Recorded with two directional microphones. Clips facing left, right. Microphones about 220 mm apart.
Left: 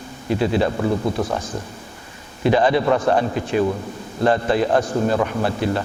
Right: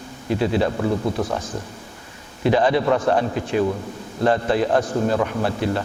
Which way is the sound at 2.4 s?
15° left (ahead or behind).